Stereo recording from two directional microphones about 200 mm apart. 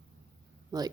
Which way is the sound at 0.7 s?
20° right (ahead or behind).